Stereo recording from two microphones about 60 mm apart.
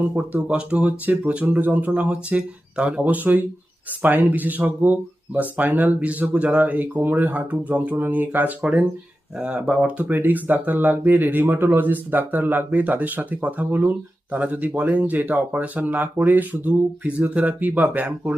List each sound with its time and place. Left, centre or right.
0.1 s speech: right